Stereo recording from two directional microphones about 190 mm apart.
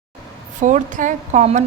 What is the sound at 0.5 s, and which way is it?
A woman's voice, 40° right (ahead or behind).